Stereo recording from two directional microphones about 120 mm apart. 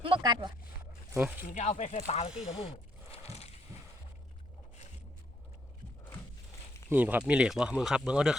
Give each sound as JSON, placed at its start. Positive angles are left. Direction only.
{"t": 0.0, "sound": "a sound", "side_deg": -40}
{"t": 1.1, "sound": "speech", "side_deg": -15}
{"t": 1.5, "sound": "speech", "side_deg": 75}
{"t": 2.0, "sound": "speech", "side_deg": 55}
{"t": 2.6, "sound": "a sound", "side_deg": 55}
{"t": 6.9, "sound": "speech", "side_deg": -15}